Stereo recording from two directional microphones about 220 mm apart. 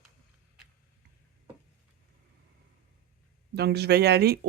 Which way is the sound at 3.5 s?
50° right (ahead or behind).